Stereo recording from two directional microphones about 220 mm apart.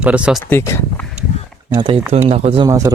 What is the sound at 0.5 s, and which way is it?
Speech, 15° left (ahead or behind).